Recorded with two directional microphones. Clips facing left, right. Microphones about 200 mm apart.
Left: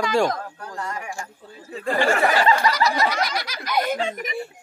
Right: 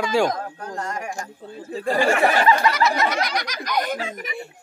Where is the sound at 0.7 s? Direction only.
45° right (ahead or behind).